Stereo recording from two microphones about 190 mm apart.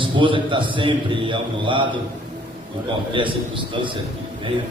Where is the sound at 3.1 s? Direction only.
25° right (ahead or behind).